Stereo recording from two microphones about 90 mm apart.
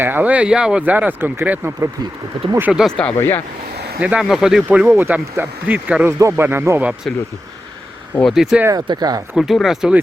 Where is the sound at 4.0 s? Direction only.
15° right (ahead or behind).